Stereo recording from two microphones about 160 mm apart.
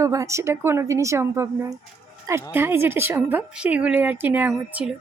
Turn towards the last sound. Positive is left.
turn(degrees=-10)  # may be behind; listen again after turning